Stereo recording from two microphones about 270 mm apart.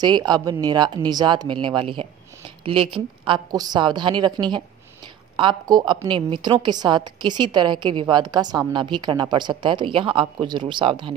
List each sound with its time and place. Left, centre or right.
0.0 s a woman's voice: centre